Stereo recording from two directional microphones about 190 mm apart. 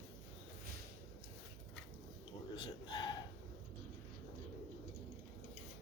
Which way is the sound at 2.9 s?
20° left (ahead or behind).